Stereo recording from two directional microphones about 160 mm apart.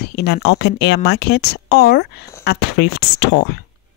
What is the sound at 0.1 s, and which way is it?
Speech, 90° left.